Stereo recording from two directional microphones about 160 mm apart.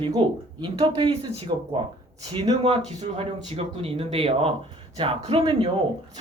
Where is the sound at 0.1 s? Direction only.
30° right (ahead or behind).